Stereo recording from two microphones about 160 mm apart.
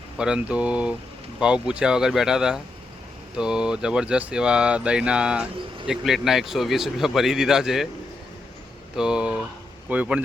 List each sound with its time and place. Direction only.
0.2 s speech: 5° right (ahead or behind)
9.0 s speech: 5° right (ahead or behind)